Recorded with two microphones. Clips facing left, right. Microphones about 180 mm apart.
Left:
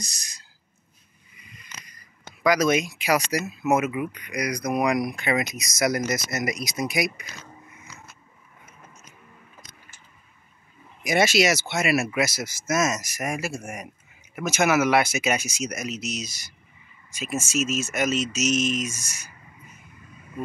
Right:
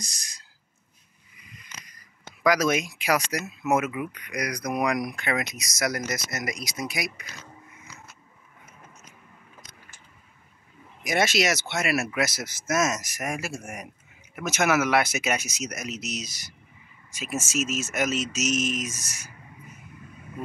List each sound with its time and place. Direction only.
0.0 s a sound: 55° right (ahead or behind)
2.4 s speech: centre (ahead or behind)
11.1 s speech: 5° left (ahead or behind)
16.3 s speech: 25° left (ahead or behind)
17.1 s speech: 5° right (ahead or behind)